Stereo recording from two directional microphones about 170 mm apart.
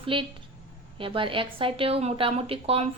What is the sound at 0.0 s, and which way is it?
A woman's voice, 30° right (ahead or behind).